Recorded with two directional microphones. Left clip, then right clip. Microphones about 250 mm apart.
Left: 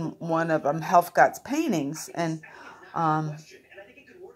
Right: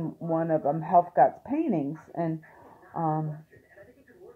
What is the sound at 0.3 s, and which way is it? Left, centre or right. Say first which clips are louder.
Speech: left 2 dB; centre.